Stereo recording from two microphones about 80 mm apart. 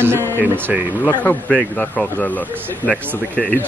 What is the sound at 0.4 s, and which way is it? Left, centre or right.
Speech, right.